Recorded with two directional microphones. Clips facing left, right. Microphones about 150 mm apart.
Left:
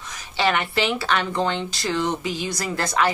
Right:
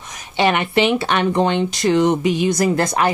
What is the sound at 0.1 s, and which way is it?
Speech, 20° right (ahead or behind).